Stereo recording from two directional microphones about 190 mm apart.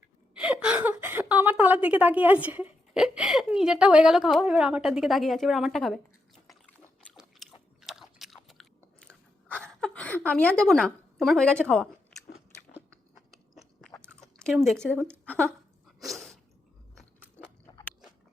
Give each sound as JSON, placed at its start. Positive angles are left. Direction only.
{"t": 0.3, "sound": "a woman's voice", "side_deg": -5}
{"t": 7.1, "sound": "chewing", "side_deg": 0}
{"t": 13.1, "sound": "chewing", "side_deg": 0}
{"t": 14.3, "sound": "speech", "side_deg": 0}
{"t": 14.9, "sound": "a woman's voice", "side_deg": -10}
{"t": 15.3, "sound": "speech", "side_deg": 5}
{"t": 16.0, "sound": "sneeze", "side_deg": 0}
{"t": 17.7, "sound": "biting", "side_deg": 20}